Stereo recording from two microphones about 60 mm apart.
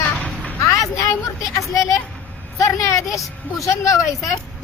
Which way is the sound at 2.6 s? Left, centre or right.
Left.